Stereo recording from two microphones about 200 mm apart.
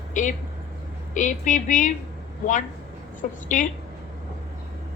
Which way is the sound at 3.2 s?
40° left (ahead or behind).